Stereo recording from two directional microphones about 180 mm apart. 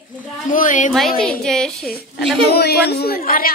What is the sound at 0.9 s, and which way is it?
A woman's voice, centre (ahead or behind).